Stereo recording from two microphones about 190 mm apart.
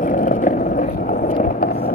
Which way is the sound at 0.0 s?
45° left (ahead or behind).